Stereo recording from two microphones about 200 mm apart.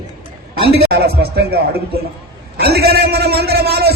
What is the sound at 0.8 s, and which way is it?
Speech, 50° right (ahead or behind).